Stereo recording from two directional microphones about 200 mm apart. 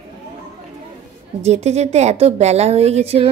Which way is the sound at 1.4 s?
35° right (ahead or behind).